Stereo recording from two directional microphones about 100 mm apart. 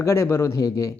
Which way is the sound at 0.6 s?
40° left (ahead or behind).